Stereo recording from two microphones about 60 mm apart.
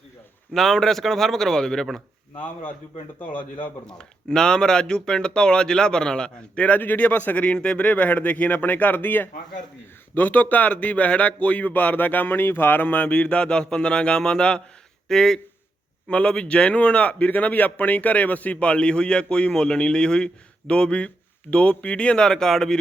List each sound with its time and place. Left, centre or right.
0.5 s speech: centre
3.8 s speech: centre
6.7 s a man's voice: left; by 22.8 s centre